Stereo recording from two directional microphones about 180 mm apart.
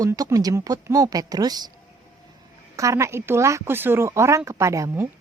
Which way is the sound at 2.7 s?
15° right (ahead or behind).